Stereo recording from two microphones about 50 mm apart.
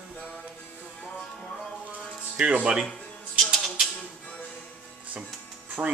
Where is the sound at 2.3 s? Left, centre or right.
Right.